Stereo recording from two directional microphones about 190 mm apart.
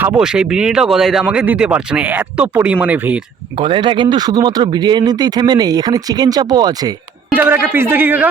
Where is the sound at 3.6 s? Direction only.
25° right (ahead or behind).